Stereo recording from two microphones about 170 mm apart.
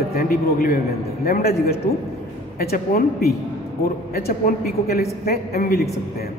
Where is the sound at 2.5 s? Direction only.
60° left (ahead or behind).